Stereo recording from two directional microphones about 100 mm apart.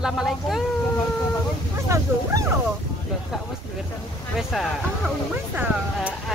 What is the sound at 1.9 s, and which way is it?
Dog, 30° right (ahead or behind).